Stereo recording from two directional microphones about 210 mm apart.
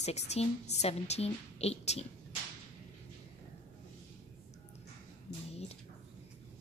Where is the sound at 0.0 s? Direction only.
30° left (ahead or behind).